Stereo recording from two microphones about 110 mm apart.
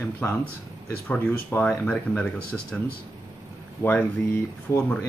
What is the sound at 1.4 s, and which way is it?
Speech, 10° left (ahead or behind).